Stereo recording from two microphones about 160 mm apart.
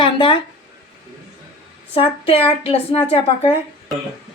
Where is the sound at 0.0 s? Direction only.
30° left (ahead or behind).